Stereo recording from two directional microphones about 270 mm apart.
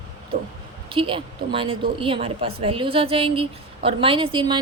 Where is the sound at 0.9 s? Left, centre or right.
Centre.